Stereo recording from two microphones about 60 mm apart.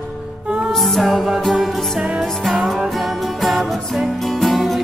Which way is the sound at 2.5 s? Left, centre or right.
Centre.